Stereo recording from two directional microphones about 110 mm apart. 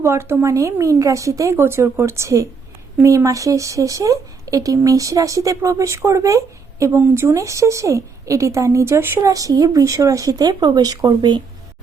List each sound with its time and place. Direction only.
0.0 s speech: 25° right (ahead or behind); by 11.4 s 40° right (ahead or behind)